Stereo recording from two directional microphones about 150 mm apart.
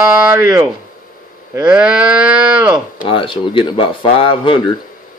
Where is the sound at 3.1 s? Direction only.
35° left (ahead or behind).